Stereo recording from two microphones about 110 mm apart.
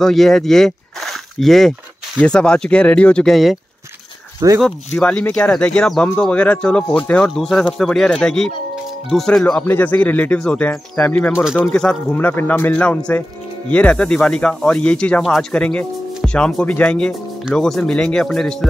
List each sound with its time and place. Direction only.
0.0 s speech: 5° left (ahead or behind)
4.6 s speech: 5° left (ahead or behind)
11.4 s speech: 5° right (ahead or behind)
11.7 s speech: 10° left (ahead or behind)